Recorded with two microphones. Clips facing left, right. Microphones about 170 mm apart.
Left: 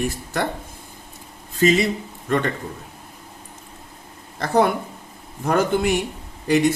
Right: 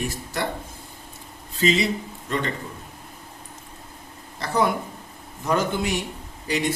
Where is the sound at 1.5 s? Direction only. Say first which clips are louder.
Left 4 dB; 50° left (ahead or behind).